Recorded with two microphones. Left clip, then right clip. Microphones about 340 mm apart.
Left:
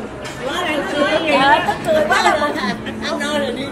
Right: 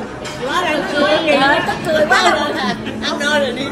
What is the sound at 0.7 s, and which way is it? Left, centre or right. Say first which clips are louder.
Speech: right 1 dB; centre.